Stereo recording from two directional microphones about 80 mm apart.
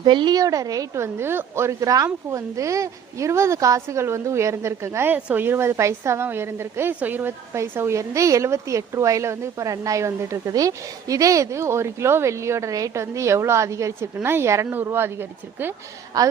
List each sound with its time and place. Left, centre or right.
0.0 s a woman's voice: right
0.3 s a woman's voice: right
7.5 s speech: right
10.5 s speech: right
16.1 s a woman's voice: right